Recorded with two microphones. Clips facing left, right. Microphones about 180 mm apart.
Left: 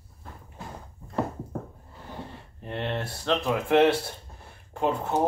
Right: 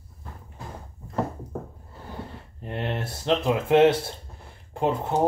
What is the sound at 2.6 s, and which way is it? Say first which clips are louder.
Speech: right 1 dB; 15° right (ahead or behind).